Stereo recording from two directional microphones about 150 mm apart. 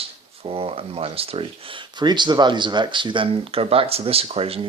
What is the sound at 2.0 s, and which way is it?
Speech, 30° right (ahead or behind).